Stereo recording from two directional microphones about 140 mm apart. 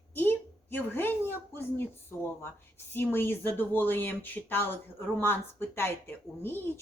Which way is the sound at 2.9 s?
15° left (ahead or behind).